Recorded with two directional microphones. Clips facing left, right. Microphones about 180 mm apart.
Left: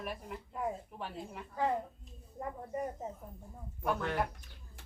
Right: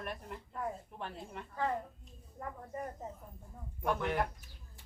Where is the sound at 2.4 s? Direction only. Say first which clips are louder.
Left 4 dB; 15° left (ahead or behind).